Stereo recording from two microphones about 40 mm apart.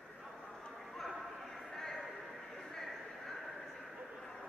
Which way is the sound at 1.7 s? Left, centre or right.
Centre.